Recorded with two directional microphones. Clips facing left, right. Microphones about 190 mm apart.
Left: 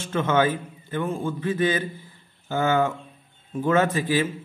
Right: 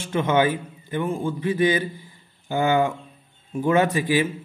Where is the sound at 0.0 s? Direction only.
15° right (ahead or behind).